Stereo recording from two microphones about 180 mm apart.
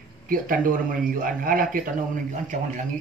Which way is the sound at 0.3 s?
50° right (ahead or behind).